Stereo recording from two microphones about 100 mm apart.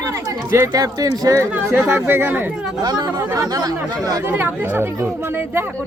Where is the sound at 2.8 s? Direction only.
45° right (ahead or behind).